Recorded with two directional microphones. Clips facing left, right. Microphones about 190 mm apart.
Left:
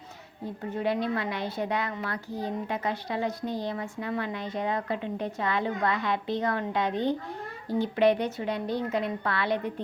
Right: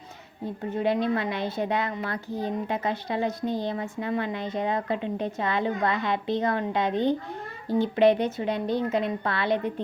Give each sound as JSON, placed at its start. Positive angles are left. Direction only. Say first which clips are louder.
{"t": 0.6, "sound": "a woman's voice", "louder": "right 3 dB", "side_deg": -25}